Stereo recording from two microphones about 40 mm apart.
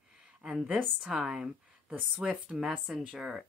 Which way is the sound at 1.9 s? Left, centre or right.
Right.